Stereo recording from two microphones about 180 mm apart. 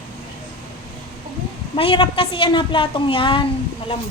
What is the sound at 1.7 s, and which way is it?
A woman's voice, 30° left (ahead or behind).